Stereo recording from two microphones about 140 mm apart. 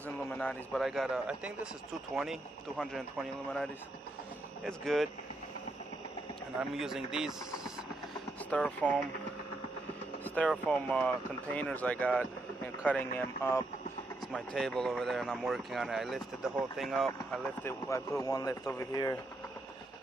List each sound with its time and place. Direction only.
0.2 s speech: 10° left (ahead or behind); by 1.7 s 5° right (ahead or behind)
2.8 s speech: 5° left (ahead or behind)
4.6 s speech: centre (ahead or behind)
6.6 s speech: 5° right (ahead or behind)
8.5 s speech: 10° left (ahead or behind)
10.2 s vehicle: 10° left (ahead or behind)
10.7 s speech: 10° left (ahead or behind)
14.3 s speech: 5° left (ahead or behind)
17.6 s speech: 20° left (ahead or behind)